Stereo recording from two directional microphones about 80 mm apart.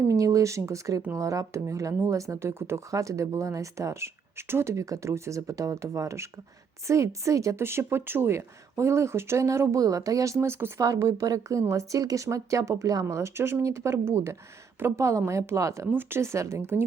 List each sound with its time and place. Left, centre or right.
0.1 s speech: right
10.4 s speech: right
10.8 s a woman's voice: right
15.9 s speech: right